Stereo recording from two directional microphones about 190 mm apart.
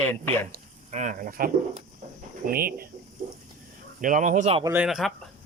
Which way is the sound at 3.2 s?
40° right (ahead or behind).